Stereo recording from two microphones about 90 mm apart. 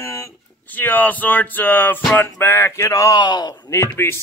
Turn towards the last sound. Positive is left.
turn(degrees=30)  # may be behind; listen again after turning